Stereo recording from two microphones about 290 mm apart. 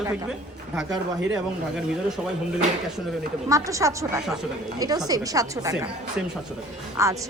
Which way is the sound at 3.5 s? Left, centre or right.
Centre.